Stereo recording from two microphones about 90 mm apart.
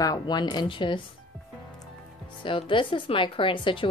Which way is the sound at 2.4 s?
65° left (ahead or behind).